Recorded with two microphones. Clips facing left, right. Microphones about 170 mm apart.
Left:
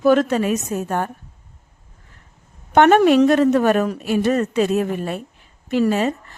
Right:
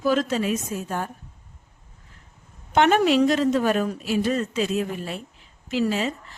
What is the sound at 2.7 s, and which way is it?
Speech, 55° left (ahead or behind).